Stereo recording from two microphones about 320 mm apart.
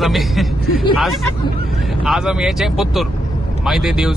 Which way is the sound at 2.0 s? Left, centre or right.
Centre.